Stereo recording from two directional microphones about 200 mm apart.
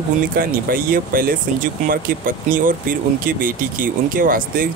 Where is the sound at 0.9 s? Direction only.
45° right (ahead or behind).